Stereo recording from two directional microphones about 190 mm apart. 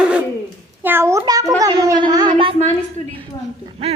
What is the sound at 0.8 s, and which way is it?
A child's voice, 10° right (ahead or behind).